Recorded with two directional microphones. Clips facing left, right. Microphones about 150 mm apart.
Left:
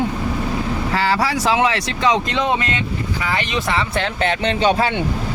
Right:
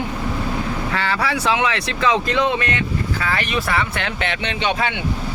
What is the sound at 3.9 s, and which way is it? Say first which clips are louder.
Speech: left 4 dB; 35° left (ahead or behind).